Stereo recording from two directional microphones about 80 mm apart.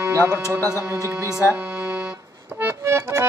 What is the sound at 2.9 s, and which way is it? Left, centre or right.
Music, right.